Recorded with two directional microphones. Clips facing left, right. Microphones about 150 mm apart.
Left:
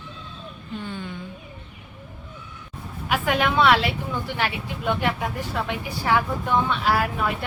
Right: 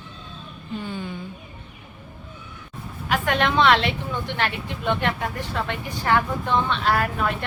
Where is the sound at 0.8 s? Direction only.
5° right (ahead or behind).